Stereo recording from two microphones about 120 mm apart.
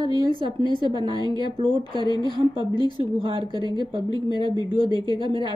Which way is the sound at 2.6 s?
50° right (ahead or behind).